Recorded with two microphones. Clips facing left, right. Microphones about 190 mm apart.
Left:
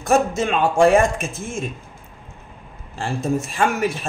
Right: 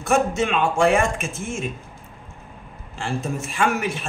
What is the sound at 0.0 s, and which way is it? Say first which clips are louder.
A man's voice: left 2 dB; 40° left (ahead or behind).